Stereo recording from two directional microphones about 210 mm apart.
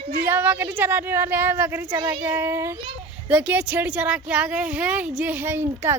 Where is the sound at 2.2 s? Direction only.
10° right (ahead or behind).